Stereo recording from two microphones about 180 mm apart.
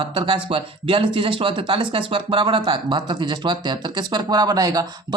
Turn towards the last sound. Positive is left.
turn(degrees=-20)  # may be behind; listen again after turning